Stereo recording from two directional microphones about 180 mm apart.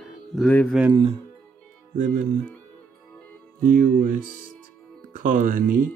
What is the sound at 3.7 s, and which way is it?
Speech, 50° right (ahead or behind).